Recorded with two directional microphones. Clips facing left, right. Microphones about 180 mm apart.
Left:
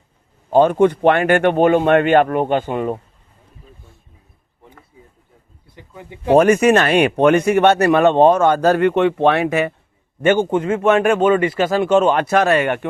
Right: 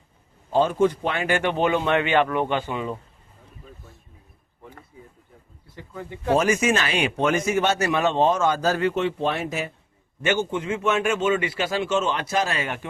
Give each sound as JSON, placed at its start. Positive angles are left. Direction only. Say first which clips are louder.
{"t": 0.5, "sound": "speech", "louder": "left 7 dB", "side_deg": 60}
{"t": 5.7, "sound": "speech", "louder": "right 2 dB", "side_deg": 15}
{"t": 6.3, "sound": "speech", "louder": "left 9 dB", "side_deg": 60}
{"t": 10.2, "sound": "speech", "louder": "left 9 dB", "side_deg": 50}